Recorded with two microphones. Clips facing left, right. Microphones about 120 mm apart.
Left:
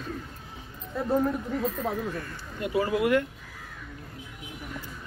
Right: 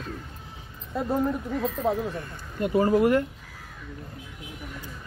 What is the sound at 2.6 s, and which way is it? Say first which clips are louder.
Speech: right 5 dB; 45° right (ahead or behind).